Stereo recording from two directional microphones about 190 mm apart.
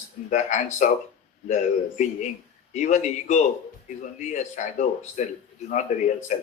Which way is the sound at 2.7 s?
40° left (ahead or behind).